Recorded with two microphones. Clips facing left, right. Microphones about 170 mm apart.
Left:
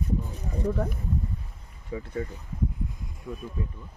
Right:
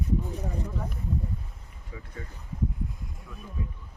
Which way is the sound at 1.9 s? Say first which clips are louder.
Left 10 dB; 35° left (ahead or behind).